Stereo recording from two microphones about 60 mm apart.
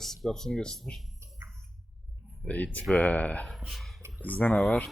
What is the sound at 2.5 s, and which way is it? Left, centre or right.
Speech, left.